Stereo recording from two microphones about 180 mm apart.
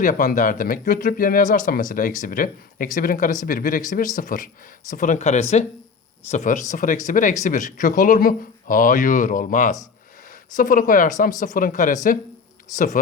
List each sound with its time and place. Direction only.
0.0 s speech: 45° left (ahead or behind)